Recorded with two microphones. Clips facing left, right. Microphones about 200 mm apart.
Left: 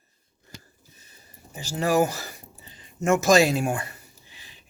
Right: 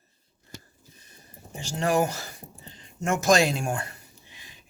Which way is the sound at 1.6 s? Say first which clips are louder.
Left 2 dB; 5° left (ahead or behind).